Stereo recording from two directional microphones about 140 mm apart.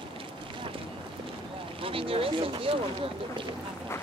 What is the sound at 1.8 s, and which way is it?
Speech, 40° right (ahead or behind).